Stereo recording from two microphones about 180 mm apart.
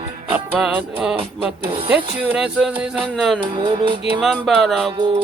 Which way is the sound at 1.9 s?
5° right (ahead or behind).